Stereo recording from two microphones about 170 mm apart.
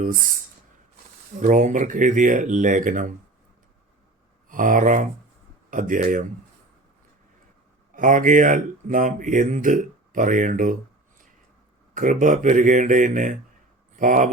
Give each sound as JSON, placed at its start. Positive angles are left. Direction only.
{"t": 0.0, "sound": "speech", "side_deg": -55}
{"t": 4.4, "sound": "speech", "side_deg": -50}
{"t": 7.9, "sound": "speech", "side_deg": -50}
{"t": 11.9, "sound": "speech", "side_deg": -50}